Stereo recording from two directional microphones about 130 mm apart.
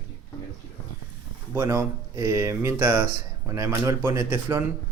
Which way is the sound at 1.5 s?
20° right (ahead or behind).